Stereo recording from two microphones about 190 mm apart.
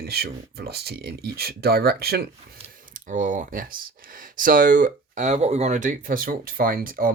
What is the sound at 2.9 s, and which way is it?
Speech, 40° right (ahead or behind).